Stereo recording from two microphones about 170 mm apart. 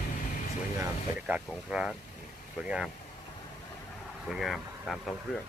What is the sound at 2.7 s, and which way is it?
Speech, 5° right (ahead or behind).